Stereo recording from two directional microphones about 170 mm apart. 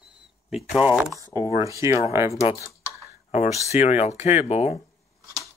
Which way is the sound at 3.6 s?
40° left (ahead or behind).